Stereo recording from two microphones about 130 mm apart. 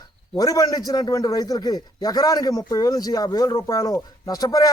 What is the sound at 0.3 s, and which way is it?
A man's voice, 30° left (ahead or behind).